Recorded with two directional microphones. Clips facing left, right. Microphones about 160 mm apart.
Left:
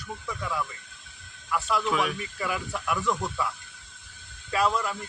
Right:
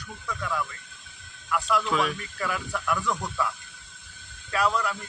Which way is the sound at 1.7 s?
20° left (ahead or behind).